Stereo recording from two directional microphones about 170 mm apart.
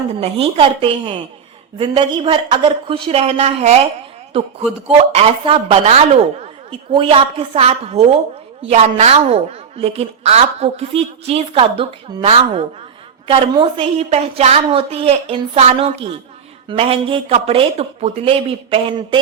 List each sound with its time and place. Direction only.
0.2 s a woman's voice: 35° right (ahead or behind)